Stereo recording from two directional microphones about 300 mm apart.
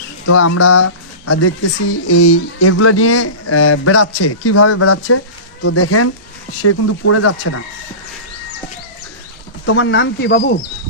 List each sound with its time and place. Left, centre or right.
0.3 s speech: left
9.6 s speech: left